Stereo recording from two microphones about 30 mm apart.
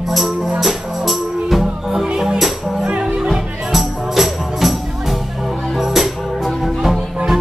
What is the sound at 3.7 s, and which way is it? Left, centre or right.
Music, centre.